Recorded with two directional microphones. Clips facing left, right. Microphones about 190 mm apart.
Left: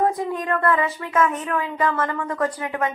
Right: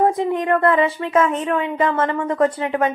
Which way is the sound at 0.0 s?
25° right (ahead or behind).